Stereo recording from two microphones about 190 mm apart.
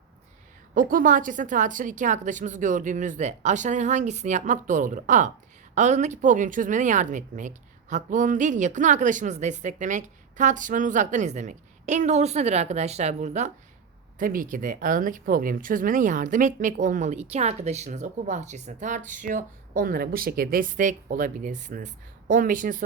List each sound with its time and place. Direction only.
0.7 s speech: 45° right (ahead or behind)